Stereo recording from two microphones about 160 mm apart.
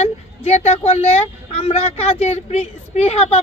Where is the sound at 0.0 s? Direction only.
45° left (ahead or behind).